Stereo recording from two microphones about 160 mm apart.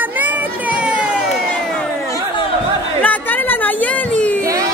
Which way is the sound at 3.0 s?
10° left (ahead or behind).